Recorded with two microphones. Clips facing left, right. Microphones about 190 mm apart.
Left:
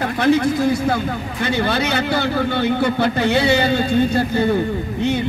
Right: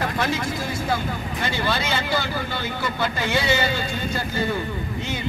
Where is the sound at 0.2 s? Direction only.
65° left (ahead or behind).